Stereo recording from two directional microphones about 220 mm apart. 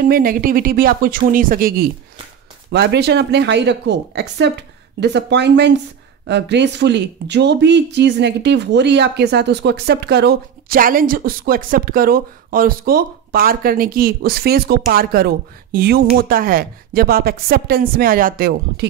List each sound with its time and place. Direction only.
0.1 s speech: 40° right (ahead or behind)